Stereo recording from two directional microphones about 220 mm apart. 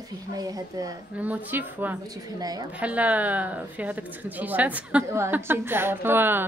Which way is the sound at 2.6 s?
5° right (ahead or behind).